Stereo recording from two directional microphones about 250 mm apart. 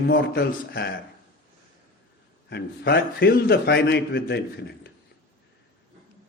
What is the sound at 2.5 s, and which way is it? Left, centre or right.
A man's voice, left.